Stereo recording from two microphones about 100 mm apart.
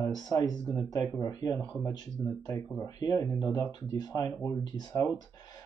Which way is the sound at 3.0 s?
45° left (ahead or behind).